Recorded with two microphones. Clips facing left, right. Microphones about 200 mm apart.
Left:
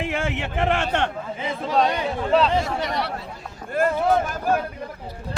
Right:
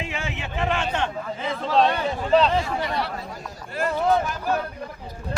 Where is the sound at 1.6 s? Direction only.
15° left (ahead or behind).